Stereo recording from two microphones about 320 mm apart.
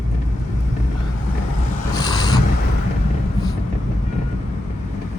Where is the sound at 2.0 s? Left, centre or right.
Centre.